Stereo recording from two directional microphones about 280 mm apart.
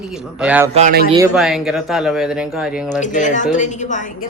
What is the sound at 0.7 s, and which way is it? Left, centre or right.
Speech, right.